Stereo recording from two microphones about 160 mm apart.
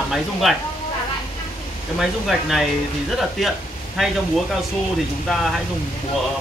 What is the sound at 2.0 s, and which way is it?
Speech, centre (ahead or behind).